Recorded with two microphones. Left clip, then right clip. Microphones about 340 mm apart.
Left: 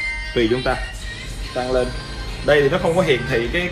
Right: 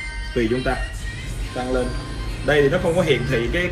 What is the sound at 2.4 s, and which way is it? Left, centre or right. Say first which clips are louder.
Speech: left 2 dB; left.